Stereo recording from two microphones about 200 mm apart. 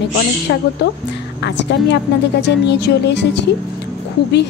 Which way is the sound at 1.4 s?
60° left (ahead or behind).